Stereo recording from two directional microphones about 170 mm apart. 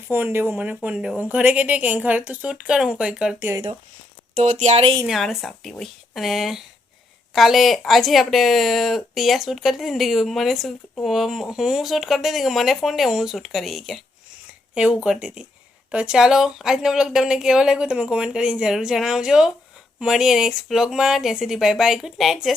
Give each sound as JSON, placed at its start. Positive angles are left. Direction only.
{"t": 0.1, "sound": "a woman's voice", "side_deg": -10}
{"t": 4.4, "sound": "speech", "side_deg": -45}
{"t": 5.0, "sound": "speech", "side_deg": 0}